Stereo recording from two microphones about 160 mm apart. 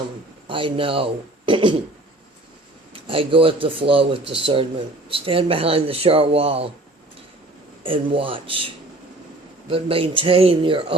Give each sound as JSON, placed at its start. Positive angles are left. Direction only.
{"t": 0.4, "sound": "a man's voice", "side_deg": -35}
{"t": 2.9, "sound": "speech", "side_deg": -35}
{"t": 7.9, "sound": "speech", "side_deg": -35}